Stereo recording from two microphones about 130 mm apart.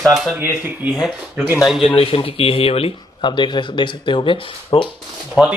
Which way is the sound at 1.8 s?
45° left (ahead or behind).